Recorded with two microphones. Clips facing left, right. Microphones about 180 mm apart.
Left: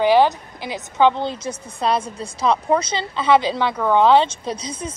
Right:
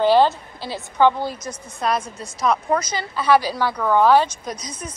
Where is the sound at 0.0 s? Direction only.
15° left (ahead or behind).